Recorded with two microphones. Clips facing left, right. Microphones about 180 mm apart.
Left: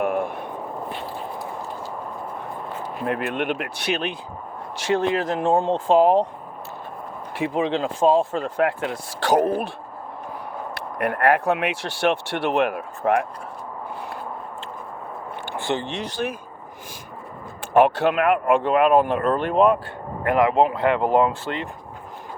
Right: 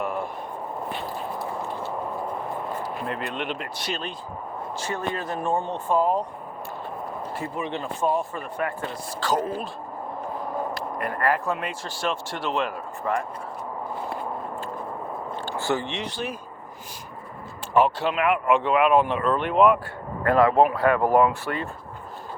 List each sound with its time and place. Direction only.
0.0 s a sound: 55° left (ahead or behind)
3.1 s speech: 60° left (ahead or behind)
4.8 s speech: 90° left
7.3 s speech: 90° left; by 9.5 s 70° left (ahead or behind)
10.8 s speech: 65° left (ahead or behind)
15.4 s a sound: 20° left (ahead or behind)
15.9 s speech: 40° left (ahead or behind)
17.7 s speech: 55° left (ahead or behind); by 19.8 s 35° left (ahead or behind)
20.2 s speech: 20° left (ahead or behind)